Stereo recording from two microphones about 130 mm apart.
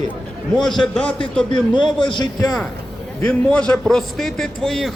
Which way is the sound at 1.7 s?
40° left (ahead or behind).